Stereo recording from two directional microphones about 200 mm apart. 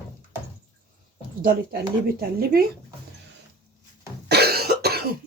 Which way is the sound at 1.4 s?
50° right (ahead or behind).